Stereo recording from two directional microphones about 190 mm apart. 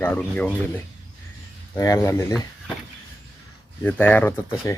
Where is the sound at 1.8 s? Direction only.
15° left (ahead or behind).